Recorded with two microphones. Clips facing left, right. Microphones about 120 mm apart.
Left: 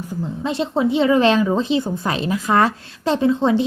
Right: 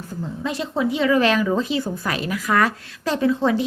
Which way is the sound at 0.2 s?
25° left (ahead or behind).